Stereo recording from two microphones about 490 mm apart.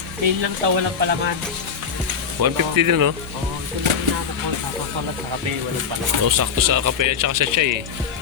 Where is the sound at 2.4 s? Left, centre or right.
Right.